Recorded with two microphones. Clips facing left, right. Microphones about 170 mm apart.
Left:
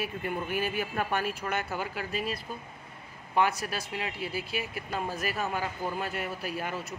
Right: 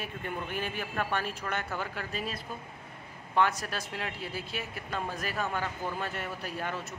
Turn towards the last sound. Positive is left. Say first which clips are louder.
# left 2 dB
turn(degrees=10)  # may be behind; listen again after turning